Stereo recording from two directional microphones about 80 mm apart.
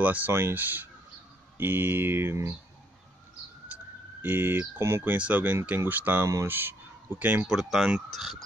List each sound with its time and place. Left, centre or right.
0.0 s speech: right
0.3 s speech: right
3.6 s emergency vehicle: right
5.1 s speech: centre
6.4 s a sound: right
7.4 s speech: centre